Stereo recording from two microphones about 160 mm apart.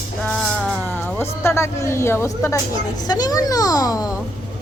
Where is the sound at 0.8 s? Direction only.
15° left (ahead or behind).